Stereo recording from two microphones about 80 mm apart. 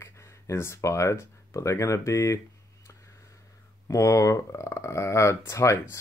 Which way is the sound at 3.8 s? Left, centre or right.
Left.